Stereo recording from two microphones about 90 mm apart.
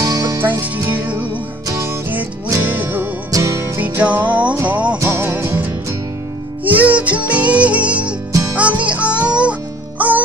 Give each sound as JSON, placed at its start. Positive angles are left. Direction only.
{"t": 0.0, "sound": "music", "side_deg": -40}
{"t": 0.4, "sound": "music", "side_deg": -20}
{"t": 2.6, "sound": "music", "side_deg": -20}
{"t": 3.3, "sound": "music", "side_deg": -40}
{"t": 3.8, "sound": "music", "side_deg": -15}
{"t": 8.3, "sound": "music", "side_deg": -40}
{"t": 8.5, "sound": "music", "side_deg": -15}